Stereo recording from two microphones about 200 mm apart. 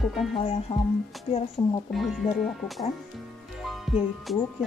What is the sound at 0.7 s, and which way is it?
Speech, 25° left (ahead or behind).